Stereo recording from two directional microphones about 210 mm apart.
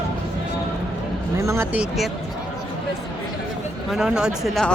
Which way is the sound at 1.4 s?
10° right (ahead or behind).